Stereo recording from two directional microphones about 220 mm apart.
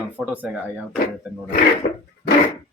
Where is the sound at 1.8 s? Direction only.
45° left (ahead or behind).